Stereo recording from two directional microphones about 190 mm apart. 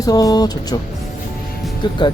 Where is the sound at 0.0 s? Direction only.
20° left (ahead or behind).